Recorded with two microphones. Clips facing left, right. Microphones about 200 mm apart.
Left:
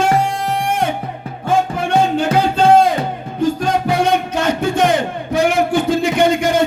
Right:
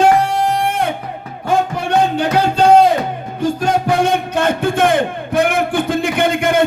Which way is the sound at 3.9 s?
55° right (ahead or behind).